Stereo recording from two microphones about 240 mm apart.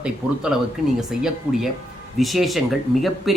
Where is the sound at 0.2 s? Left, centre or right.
Centre.